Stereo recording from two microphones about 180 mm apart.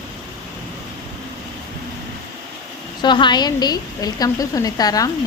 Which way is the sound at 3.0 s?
25° left (ahead or behind).